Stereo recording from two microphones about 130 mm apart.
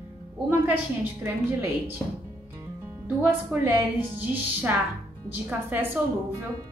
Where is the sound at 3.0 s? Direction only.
15° right (ahead or behind).